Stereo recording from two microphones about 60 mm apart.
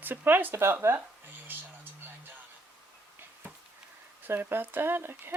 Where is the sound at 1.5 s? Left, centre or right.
Right.